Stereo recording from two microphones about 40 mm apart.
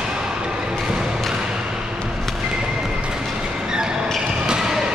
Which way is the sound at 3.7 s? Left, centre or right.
Centre.